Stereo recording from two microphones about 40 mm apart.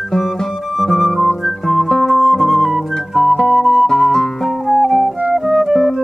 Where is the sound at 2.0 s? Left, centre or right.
Centre.